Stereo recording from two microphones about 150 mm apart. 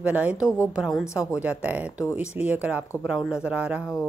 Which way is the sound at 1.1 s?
20° left (ahead or behind).